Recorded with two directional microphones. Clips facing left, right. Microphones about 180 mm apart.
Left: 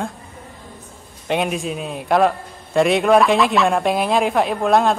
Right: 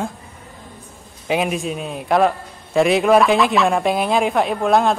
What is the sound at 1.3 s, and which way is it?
A man's voice, centre (ahead or behind).